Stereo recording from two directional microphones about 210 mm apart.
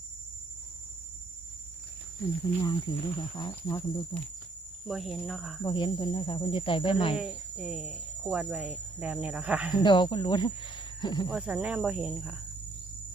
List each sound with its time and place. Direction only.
2.6 s speech: 20° left (ahead or behind)
4.9 s speech: centre (ahead or behind)
5.6 s speech: 20° left (ahead or behind)
7.2 s speech: 5° right (ahead or behind)
9.7 s speech: 20° left (ahead or behind)
11.3 s speech: 5° right (ahead or behind)